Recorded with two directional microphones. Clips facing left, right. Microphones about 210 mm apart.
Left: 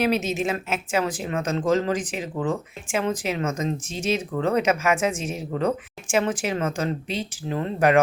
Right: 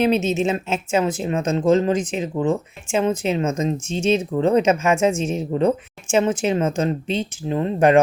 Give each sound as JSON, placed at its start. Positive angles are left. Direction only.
{"t": 0.0, "sound": "speech", "side_deg": -25}